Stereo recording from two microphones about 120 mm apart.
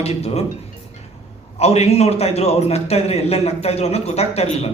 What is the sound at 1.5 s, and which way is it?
A man's voice, 60° left (ahead or behind).